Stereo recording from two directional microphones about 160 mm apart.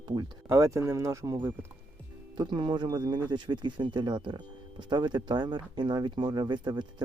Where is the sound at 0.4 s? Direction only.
20° right (ahead or behind).